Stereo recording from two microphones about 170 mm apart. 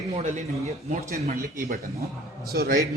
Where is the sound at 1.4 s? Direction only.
55° right (ahead or behind).